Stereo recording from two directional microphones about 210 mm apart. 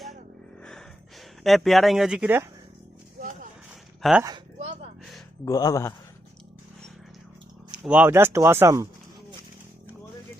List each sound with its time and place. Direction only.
0.6 s a sound: 5° left (ahead or behind)
1.5 s speech: centre (ahead or behind)
4.0 s speech: centre (ahead or behind)
4.6 s a sound: 30° right (ahead or behind)
5.5 s speech: 15° left (ahead or behind)
7.7 s speech: 5° right (ahead or behind)